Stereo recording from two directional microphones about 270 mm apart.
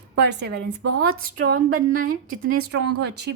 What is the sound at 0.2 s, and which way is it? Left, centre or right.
A woman's voice, right.